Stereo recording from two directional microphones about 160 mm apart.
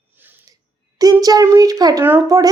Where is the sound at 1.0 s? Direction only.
20° right (ahead or behind).